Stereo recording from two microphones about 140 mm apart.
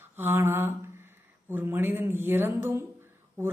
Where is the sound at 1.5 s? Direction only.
15° right (ahead or behind).